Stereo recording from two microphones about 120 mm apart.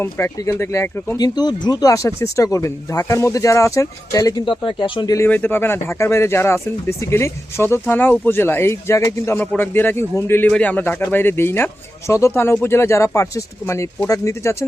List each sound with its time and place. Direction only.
0.0 s speech: 25° left (ahead or behind)
1.2 s speech: 35° left (ahead or behind)
4.6 s speech: 40° left (ahead or behind)
5.1 s a man's voice: 20° left (ahead or behind)